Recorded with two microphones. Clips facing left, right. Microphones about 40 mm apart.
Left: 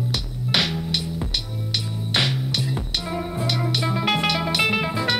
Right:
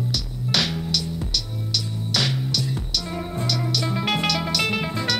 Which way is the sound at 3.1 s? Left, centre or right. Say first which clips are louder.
Left 2 dB; centre.